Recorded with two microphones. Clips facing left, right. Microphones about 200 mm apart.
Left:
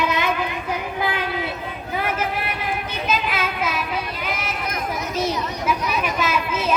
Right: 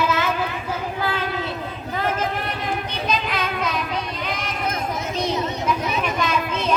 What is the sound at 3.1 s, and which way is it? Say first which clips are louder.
Child singing: left 1 dB; 5° left (ahead or behind).